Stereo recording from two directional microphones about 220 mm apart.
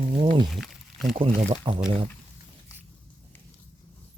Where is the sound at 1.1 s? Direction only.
25° right (ahead or behind).